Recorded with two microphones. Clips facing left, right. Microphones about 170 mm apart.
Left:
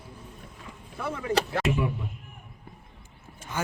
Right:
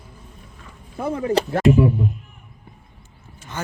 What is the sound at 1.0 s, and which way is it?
Speech, 45° right (ahead or behind).